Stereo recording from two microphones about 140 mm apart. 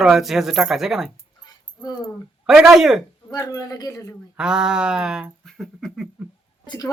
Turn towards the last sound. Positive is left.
turn(degrees=30)  # may be behind; listen again after turning